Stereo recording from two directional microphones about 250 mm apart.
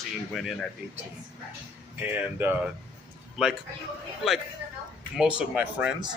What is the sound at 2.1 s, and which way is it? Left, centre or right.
Speech, centre.